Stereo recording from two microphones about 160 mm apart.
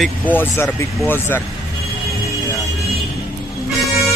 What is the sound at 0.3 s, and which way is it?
Speech, 15° left (ahead or behind).